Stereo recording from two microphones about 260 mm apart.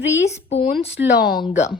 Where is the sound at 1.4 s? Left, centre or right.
Left.